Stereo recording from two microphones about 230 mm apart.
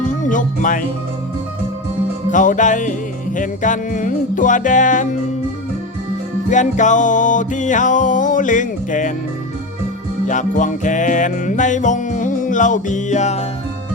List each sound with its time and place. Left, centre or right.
0.2 s speech: left
2.3 s music: left
6.5 s music: left
10.2 s music: left